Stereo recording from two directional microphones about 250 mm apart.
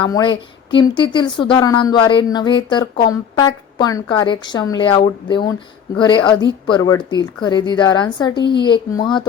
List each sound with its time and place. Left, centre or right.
0.0 s a woman's voice: centre